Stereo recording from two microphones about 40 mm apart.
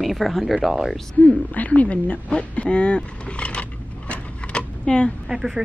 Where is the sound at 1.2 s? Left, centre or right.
Left.